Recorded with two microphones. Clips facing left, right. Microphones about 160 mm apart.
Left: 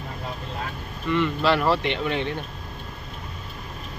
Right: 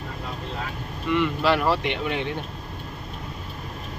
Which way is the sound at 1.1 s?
10° right (ahead or behind).